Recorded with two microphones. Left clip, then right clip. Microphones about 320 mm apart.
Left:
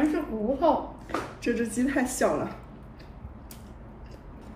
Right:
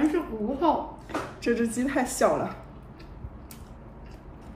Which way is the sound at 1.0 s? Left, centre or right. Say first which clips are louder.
Right 1 dB; centre.